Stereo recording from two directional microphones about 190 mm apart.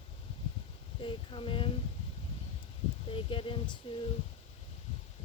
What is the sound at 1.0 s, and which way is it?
Speech, 25° left (ahead or behind).